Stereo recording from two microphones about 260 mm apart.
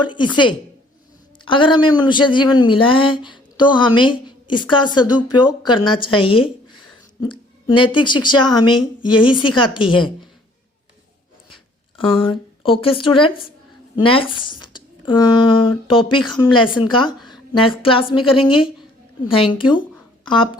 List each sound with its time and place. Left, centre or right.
0.0 s a woman's voice: centre
11.9 s speech: centre